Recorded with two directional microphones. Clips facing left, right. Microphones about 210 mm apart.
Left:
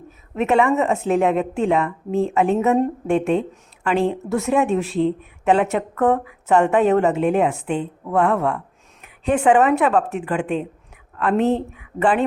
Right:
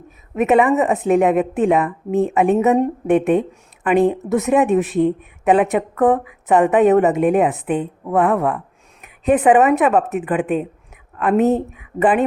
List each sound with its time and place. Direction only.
0.3 s a woman's voice: 15° right (ahead or behind)
11.7 s a woman's voice: 15° right (ahead or behind)